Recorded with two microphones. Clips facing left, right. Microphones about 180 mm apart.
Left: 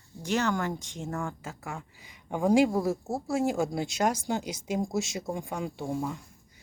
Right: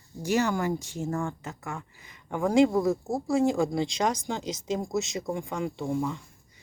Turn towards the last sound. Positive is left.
turn(degrees=10)  # may be behind; listen again after turning